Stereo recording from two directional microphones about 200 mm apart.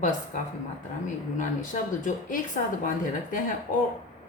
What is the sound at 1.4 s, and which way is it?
Speech, 40° left (ahead or behind).